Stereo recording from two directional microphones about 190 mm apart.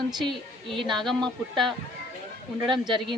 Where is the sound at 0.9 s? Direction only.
Centre (ahead or behind).